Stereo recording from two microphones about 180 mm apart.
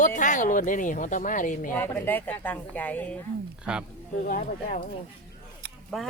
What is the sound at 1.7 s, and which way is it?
Speech, 10° left (ahead or behind).